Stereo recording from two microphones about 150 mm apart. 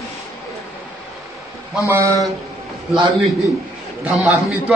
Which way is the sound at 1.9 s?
20° right (ahead or behind).